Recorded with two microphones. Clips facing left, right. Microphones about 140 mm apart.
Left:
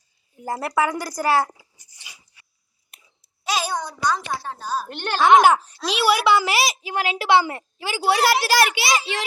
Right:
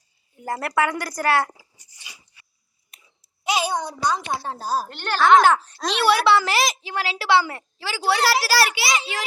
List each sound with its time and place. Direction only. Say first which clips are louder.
0.4 s a woman's voice: even; 10° left (ahead or behind)
3.4 s a child's voice: right 2 dB; 20° right (ahead or behind)
4.4 s a woman's voice: right 2 dB; 40° right (ahead or behind)
4.9 s a woman's voice: left 1 dB; 20° left (ahead or behind)